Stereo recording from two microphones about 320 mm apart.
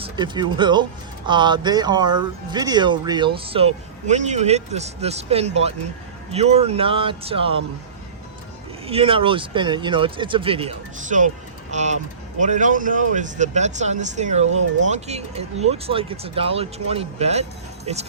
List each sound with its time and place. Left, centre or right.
0.0 s speech: centre
8.9 s speech: centre